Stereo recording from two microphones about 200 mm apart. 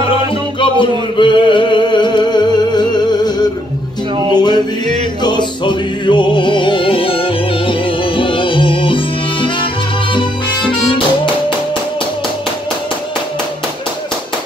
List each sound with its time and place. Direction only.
0.3 s music: 25° left (ahead or behind)
4.3 s male singing: 20° left (ahead or behind)
5.2 s music: 20° left (ahead or behind)